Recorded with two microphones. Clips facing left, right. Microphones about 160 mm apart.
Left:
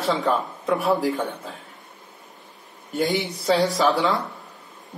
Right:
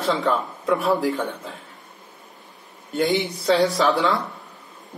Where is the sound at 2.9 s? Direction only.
Centre (ahead or behind).